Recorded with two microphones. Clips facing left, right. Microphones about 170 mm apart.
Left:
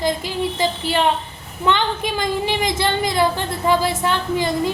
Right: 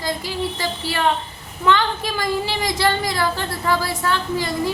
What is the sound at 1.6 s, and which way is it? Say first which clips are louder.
Speech: even; 20° left (ahead or behind).